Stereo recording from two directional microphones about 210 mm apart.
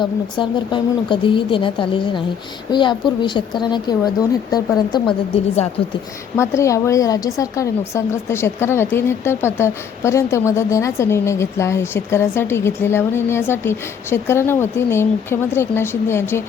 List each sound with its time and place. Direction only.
0.0 s speech: 20° left (ahead or behind)
6.3 s a woman's voice: 15° left (ahead or behind)